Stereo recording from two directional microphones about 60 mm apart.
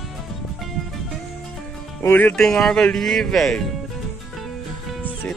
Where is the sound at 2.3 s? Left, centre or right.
Centre.